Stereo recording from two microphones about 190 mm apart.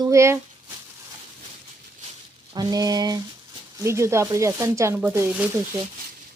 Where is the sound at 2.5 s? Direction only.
20° right (ahead or behind).